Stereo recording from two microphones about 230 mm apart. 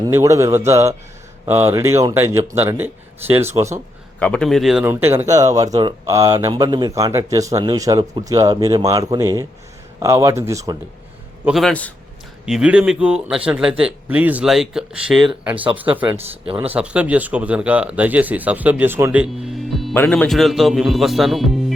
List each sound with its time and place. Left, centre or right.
0.0 s speech: centre
4.2 s speech: centre
11.4 s speech: centre
15.5 s speech: right
16.0 s speech: centre
16.5 s speech: right
16.7 s speech: centre